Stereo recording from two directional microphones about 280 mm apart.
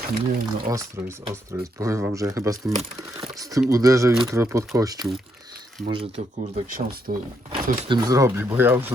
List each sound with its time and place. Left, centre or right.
0.0 s speech: right
0.7 s speech: centre